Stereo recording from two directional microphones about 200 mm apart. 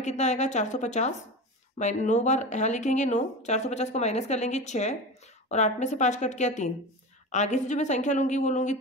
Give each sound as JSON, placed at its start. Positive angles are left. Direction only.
{"t": 0.0, "sound": "speech", "side_deg": 35}